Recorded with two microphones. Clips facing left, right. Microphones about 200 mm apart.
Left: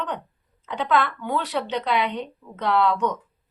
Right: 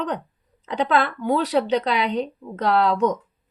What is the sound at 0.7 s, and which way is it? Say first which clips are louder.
A woman's voice: right 2 dB; 40° right (ahead or behind).